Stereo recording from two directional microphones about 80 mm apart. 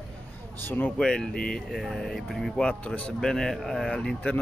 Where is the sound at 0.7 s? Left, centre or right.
Left.